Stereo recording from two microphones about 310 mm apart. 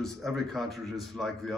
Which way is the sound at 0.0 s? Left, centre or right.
Centre.